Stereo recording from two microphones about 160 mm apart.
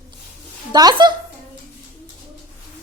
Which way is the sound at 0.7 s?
25° right (ahead or behind).